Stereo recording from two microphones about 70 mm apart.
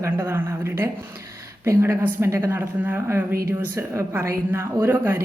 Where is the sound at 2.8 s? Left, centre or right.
Right.